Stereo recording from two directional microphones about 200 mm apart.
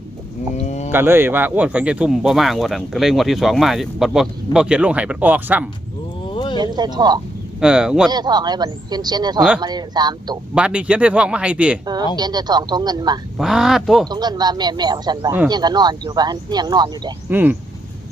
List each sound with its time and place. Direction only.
0.5 s sheep: 35° left (ahead or behind)
0.9 s speech: 10° right (ahead or behind)
6.3 s a sound: 20° left (ahead or behind)
6.6 s speech: 20° right (ahead or behind)
7.6 s speech: 5° right (ahead or behind)
8.1 s speech: 20° right (ahead or behind)
10.5 s speech: 5° right (ahead or behind)
12.1 s speech: 20° right (ahead or behind)
13.4 s speech: centre (ahead or behind)
14.1 s speech: 20° right (ahead or behind)
17.2 s speech: 10° right (ahead or behind)